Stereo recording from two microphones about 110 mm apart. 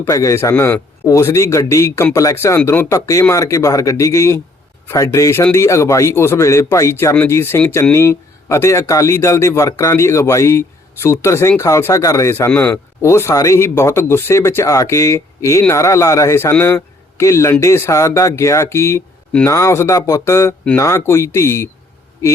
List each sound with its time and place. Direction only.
0.1 s speech: 30° left (ahead or behind)